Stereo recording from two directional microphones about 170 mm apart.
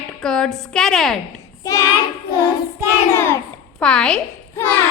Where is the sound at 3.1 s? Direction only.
15° left (ahead or behind).